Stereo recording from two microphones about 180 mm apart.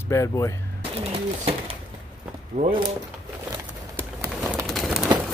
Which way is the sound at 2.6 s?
40° right (ahead or behind).